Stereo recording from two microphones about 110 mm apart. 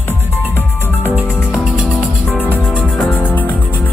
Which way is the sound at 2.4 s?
15° left (ahead or behind).